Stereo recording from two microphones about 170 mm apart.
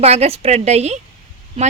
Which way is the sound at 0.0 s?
40° right (ahead or behind).